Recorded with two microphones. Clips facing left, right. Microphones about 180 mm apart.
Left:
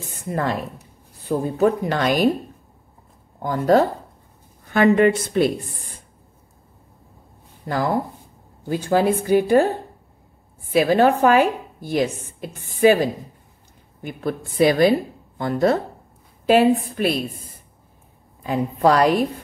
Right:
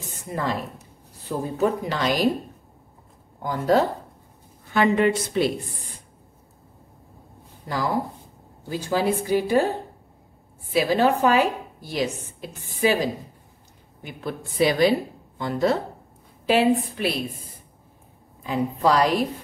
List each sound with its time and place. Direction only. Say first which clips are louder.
0.3 s a woman's voice: left 4 dB; 60° left (ahead or behind)
1.6 s a woman's voice: left 4 dB; 55° left (ahead or behind)
3.4 s a woman's voice: left 4 dB; 50° left (ahead or behind)
7.6 s a woman's voice: left 3 dB; 55° left (ahead or behind)
10.7 s a woman's voice: left 4 dB; 55° left (ahead or behind)
18.4 s a woman's voice: left 3 dB; 55° left (ahead or behind)